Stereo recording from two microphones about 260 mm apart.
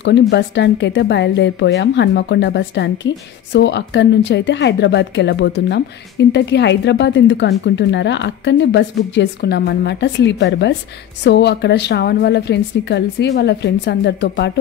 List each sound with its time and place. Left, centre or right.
0.3 s a woman's voice: left